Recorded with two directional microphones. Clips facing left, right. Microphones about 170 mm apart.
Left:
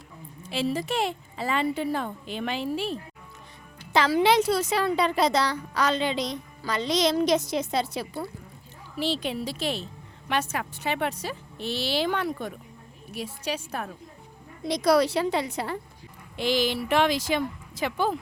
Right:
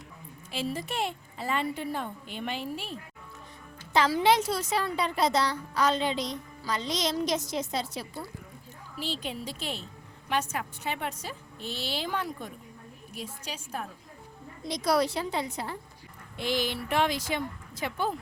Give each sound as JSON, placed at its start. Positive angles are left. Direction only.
{"t": 0.5, "sound": "a woman's voice", "side_deg": 90}
{"t": 3.9, "sound": "a woman's voice", "side_deg": 75}
{"t": 9.0, "sound": "a woman's voice", "side_deg": 75}
{"t": 16.4, "sound": "a woman's voice", "side_deg": 90}